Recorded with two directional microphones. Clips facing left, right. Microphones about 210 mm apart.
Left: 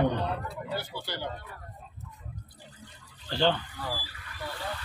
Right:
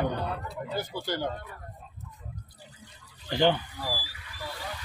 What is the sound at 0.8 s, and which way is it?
Speech, 45° right (ahead or behind).